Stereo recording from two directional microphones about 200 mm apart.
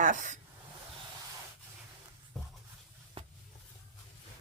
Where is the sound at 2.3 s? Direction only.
Centre (ahead or behind).